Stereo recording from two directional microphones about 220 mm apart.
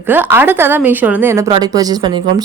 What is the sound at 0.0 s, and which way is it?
Speech, 10° right (ahead or behind).